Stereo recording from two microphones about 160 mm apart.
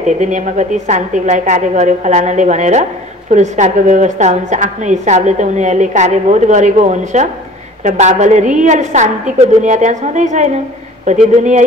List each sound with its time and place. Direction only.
0.2 s a woman's voice: 50° right (ahead or behind)